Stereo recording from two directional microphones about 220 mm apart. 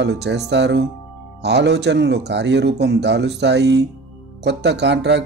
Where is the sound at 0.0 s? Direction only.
50° right (ahead or behind).